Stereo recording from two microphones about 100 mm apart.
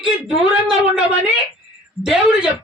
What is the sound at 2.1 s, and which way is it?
Speech, 10° right (ahead or behind).